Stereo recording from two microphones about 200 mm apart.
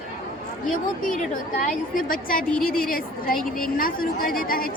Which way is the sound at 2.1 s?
45° left (ahead or behind).